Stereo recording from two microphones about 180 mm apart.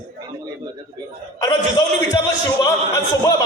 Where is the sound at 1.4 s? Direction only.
20° left (ahead or behind).